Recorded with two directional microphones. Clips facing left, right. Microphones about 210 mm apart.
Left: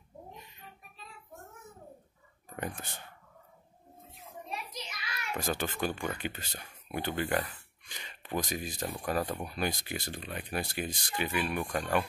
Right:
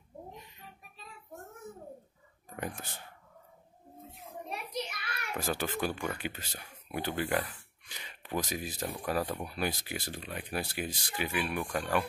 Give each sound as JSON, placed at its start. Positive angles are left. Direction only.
{"t": 2.5, "sound": "speech", "side_deg": -5}
{"t": 4.5, "sound": "a sound", "side_deg": -60}
{"t": 5.3, "sound": "speech", "side_deg": -5}